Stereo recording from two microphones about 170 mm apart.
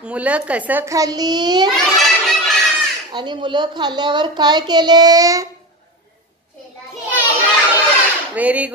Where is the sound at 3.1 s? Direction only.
25° right (ahead or behind).